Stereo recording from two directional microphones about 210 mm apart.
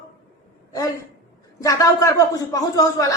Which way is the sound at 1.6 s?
15° left (ahead or behind).